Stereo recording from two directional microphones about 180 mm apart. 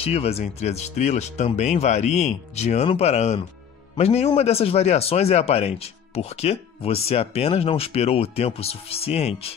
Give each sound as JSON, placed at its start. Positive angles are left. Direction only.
{"t": 0.0, "sound": "a man's voice", "side_deg": 35}